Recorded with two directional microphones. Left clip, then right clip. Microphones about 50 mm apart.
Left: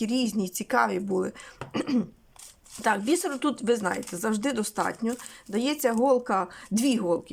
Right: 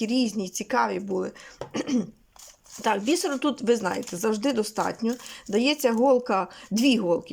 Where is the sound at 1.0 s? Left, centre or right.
Centre.